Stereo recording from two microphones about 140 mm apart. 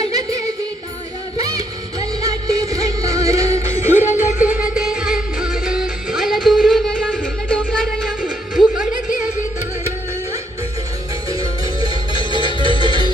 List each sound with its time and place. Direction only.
0.1 s music: 25° right (ahead or behind); by 8.1 s 5° left (ahead or behind)
8.2 s music: 65° left (ahead or behind)
11.3 s music: 30° right (ahead or behind)